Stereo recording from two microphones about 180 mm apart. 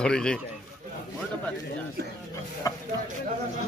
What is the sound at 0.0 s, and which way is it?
Speech, 5° left (ahead or behind).